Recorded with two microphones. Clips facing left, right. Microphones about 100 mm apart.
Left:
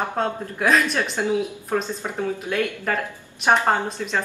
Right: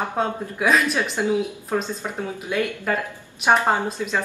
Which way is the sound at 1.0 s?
15° right (ahead or behind).